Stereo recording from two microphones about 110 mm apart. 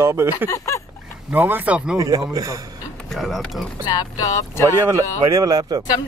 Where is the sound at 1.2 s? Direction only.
15° right (ahead or behind).